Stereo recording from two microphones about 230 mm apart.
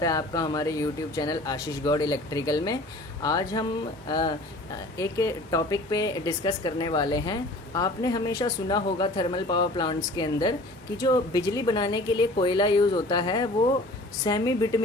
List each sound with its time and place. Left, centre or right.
0.0 s speech: centre